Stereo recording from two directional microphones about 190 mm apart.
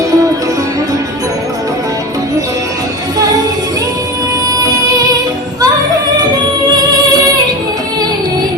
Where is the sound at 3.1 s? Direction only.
20° right (ahead or behind).